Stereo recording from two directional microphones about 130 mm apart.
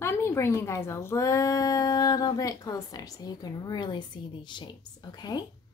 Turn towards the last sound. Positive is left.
turn(degrees=30)  # may be behind; listen again after turning